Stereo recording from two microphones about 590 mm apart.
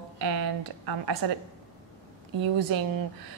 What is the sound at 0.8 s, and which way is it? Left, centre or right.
Speech, right.